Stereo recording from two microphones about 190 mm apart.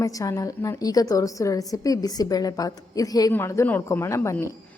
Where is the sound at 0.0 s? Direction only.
15° left (ahead or behind).